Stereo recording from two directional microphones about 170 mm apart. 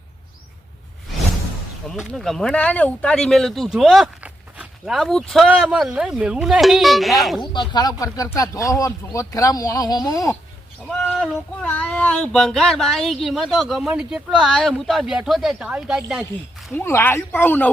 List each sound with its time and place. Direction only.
1.9 s speech: centre (ahead or behind)
7.5 s speech: 25° left (ahead or behind)
11.2 s speech: 10° left (ahead or behind)
16.7 s speech: 15° left (ahead or behind)